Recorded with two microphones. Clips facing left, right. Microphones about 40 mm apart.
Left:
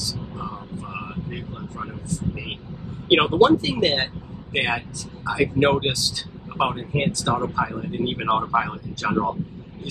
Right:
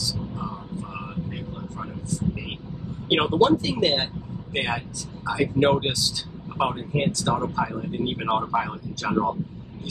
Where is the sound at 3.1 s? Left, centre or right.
Left.